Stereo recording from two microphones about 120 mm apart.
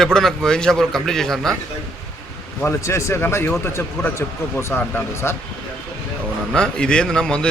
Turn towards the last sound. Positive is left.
turn(degrees=5)  # may be behind; listen again after turning